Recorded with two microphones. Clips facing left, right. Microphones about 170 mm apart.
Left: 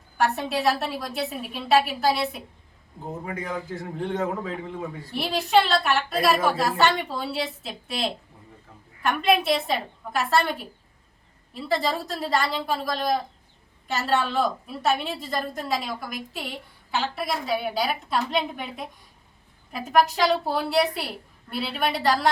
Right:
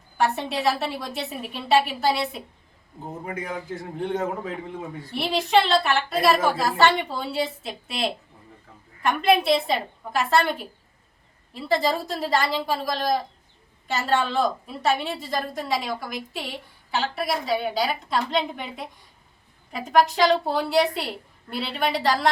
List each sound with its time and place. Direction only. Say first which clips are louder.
0.2 s a woman's voice: even; centre (ahead or behind)
3.2 s a man's voice: right 1 dB; 20° right (ahead or behind)
5.1 s a woman's voice: even; centre (ahead or behind)
12.0 s a woman's voice: right 1 dB; centre (ahead or behind)